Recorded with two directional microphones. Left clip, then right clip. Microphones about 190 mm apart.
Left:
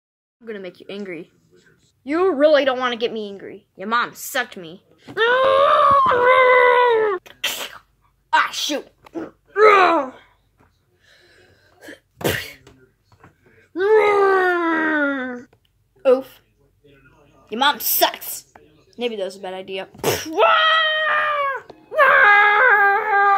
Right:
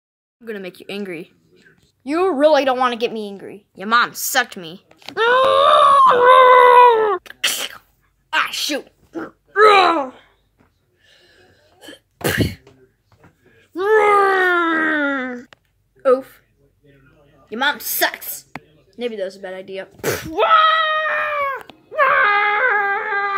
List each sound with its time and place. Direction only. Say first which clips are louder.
0.5 s a woman's voice: right 3 dB; 30° right (ahead or behind); by 10.2 s 10° right (ahead or behind)
11.1 s sneeze: right 1 dB; centre (ahead or behind)
13.6 s wail: even; 10° right (ahead or behind)
16.0 s a woman's voice: even; 10° left (ahead or behind)
17.5 s speech: left 1 dB; 10° left (ahead or behind)
21.9 s a sound: left 2 dB; 30° left (ahead or behind)